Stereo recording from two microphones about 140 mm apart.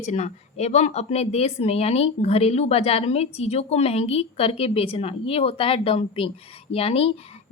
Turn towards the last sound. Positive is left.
turn(degrees=45)  # may be behind; listen again after turning